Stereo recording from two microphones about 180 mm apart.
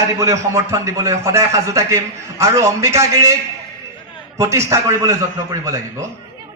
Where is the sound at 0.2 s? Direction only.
15° right (ahead or behind).